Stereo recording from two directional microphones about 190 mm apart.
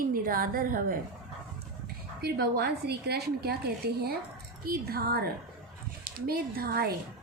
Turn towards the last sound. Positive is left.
turn(degrees=-50)  # may be behind; listen again after turning